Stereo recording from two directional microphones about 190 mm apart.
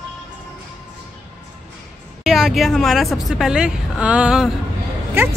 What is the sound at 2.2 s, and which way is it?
A woman's voice, centre (ahead or behind).